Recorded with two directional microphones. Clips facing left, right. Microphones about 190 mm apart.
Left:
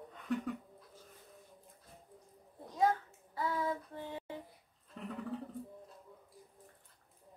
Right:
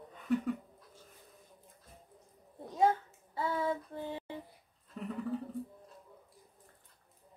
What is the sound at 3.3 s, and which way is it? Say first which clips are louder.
Female singing: right 2 dB; 25° right (ahead or behind).